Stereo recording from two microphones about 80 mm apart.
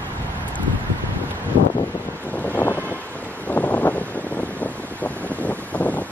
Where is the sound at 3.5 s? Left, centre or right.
Left.